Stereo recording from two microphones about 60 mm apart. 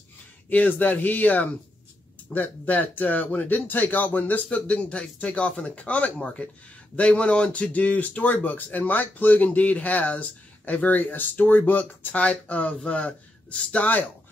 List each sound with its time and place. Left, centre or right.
0.5 s speech: left